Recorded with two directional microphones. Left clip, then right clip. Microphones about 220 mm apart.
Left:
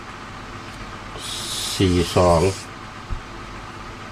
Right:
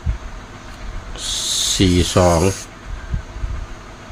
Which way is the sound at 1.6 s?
40° right (ahead or behind).